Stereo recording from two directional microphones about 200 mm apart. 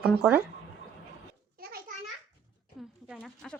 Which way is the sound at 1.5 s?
50° right (ahead or behind).